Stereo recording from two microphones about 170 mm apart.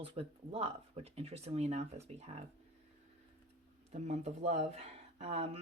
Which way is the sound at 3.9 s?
40° right (ahead or behind).